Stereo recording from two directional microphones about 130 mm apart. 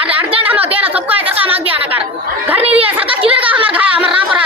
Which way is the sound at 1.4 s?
45° right (ahead or behind).